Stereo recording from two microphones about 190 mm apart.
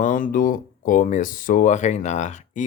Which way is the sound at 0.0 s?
45° left (ahead or behind).